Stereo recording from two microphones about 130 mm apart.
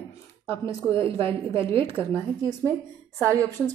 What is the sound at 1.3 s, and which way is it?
Speech, 45° right (ahead or behind).